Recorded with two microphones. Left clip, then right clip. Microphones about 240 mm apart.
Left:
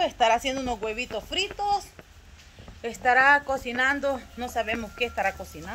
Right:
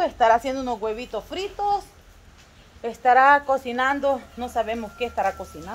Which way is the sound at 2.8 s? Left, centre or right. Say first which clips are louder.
Right 4 dB; centre.